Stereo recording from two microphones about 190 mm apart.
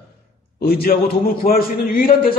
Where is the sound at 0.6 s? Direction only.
55° left (ahead or behind).